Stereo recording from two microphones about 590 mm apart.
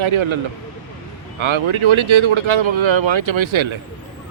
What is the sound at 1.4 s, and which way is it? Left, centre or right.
Speech, right.